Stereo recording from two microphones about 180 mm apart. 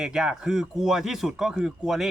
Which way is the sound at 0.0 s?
5° right (ahead or behind).